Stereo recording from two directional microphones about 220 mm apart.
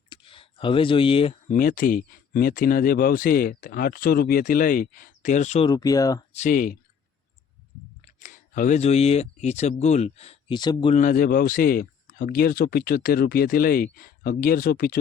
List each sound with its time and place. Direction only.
0.1 s a sound: 25° left (ahead or behind)
1.5 s speech: 40° left (ahead or behind)
5.6 s speech: 15° left (ahead or behind)
6.3 s speech: 35° left (ahead or behind)
8.2 s speech: 35° left (ahead or behind); by 10.9 s 20° left (ahead or behind)
10.9 s speech: 35° left (ahead or behind)